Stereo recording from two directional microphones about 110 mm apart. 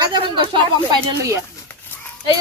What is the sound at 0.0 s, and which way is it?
Speech, 40° right (ahead or behind).